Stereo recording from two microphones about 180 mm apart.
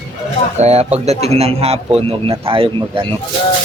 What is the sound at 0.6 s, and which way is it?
A man's voice, 35° right (ahead or behind).